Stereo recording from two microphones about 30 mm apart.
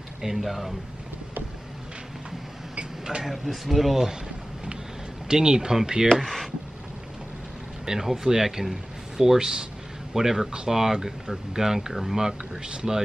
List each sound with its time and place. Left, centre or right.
0.2 s speech: centre
2.8 s a sound: right
3.3 s speech: centre
5.3 s speech: right
6.2 s speech: centre
7.9 s a man's voice: right
10.5 s speech: right
10.8 s speech: centre
11.9 s speech: centre